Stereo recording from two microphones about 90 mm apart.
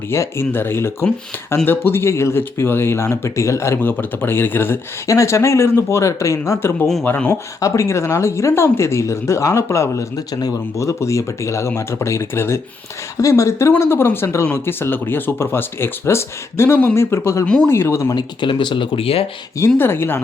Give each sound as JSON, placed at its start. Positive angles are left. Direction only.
{"t": 0.1, "sound": "speech", "side_deg": 30}
{"t": 7.6, "sound": "speech", "side_deg": 35}
{"t": 17.4, "sound": "speech", "side_deg": 10}
{"t": 17.7, "sound": "speech", "side_deg": 30}
{"t": 18.1, "sound": "speech", "side_deg": 55}
{"t": 19.5, "sound": "speech", "side_deg": 30}